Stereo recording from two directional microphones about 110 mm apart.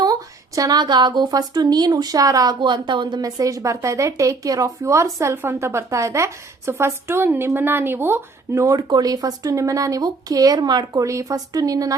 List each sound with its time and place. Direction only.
0.0 s a woman's voice: 35° right (ahead or behind)